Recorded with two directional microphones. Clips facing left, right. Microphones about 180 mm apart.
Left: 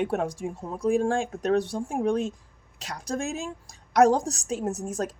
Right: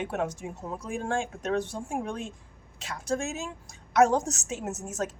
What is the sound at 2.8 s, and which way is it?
A woman's voice, 40° left (ahead or behind).